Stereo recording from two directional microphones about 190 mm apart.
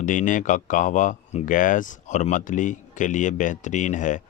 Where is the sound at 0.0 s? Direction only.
40° left (ahead or behind).